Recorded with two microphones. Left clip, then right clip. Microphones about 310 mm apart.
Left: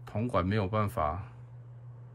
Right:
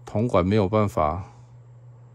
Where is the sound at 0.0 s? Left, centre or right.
Centre.